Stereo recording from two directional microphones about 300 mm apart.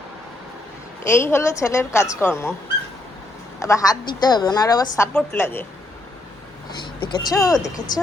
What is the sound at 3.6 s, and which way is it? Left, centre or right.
A woman's voice, centre.